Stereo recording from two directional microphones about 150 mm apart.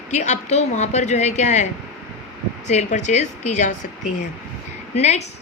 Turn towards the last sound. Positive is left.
turn(degrees=50)  # may be behind; listen again after turning